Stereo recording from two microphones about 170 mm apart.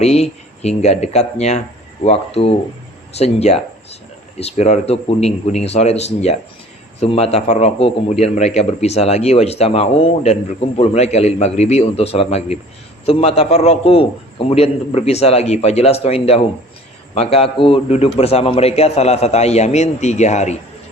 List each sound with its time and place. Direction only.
0.0 s a man's voice: 40° left (ahead or behind)